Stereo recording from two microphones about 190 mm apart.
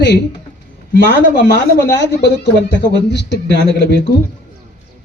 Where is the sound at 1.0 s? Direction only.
65° left (ahead or behind).